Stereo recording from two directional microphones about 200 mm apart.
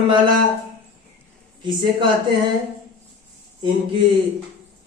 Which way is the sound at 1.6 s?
25° right (ahead or behind).